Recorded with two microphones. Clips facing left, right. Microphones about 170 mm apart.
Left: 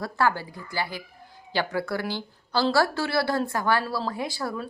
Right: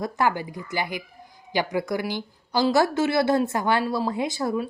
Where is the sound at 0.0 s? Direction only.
15° right (ahead or behind).